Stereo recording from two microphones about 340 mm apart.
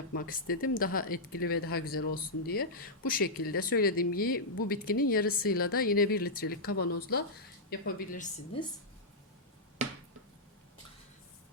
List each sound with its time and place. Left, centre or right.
0.1 s speech: left